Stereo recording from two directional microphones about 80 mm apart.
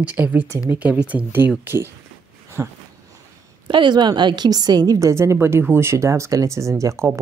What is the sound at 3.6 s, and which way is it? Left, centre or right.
A woman's voice, right.